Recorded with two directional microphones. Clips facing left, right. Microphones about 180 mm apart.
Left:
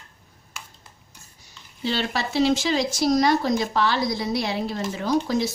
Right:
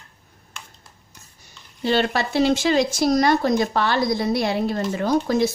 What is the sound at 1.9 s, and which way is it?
Speech, 55° right (ahead or behind).